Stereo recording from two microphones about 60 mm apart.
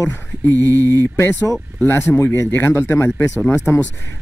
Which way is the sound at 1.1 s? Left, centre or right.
Left.